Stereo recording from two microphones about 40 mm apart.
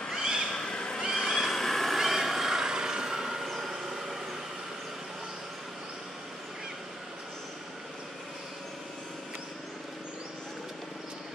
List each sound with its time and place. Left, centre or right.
0.1 s owl: centre
0.5 s cat: centre
1.1 s vehicle: centre
2.0 s vehicle: centre